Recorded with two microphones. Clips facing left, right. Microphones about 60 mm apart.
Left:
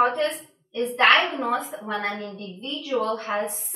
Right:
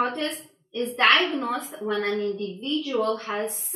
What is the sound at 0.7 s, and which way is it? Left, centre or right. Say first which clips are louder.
A woman's voice: left 2 dB; centre.